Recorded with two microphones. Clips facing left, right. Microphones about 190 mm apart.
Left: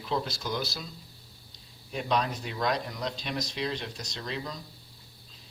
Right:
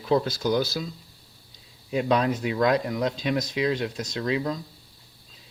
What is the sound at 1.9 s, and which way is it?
Speech, 70° right (ahead or behind).